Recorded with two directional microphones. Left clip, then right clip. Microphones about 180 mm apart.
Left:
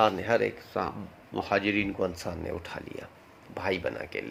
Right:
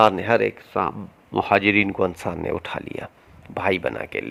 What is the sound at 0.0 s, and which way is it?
Speech, 60° right (ahead or behind).